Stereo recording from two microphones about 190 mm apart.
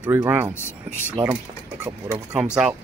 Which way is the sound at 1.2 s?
25° right (ahead or behind).